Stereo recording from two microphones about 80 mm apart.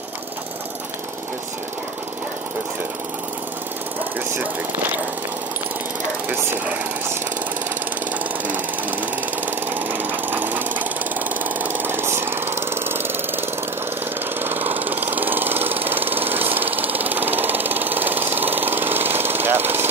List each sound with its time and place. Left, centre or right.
4.4 s speech: right
9.7 s jackhammer: right
14.4 s engine: right